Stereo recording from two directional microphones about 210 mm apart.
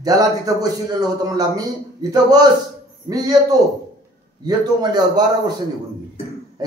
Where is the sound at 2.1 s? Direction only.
20° right (ahead or behind).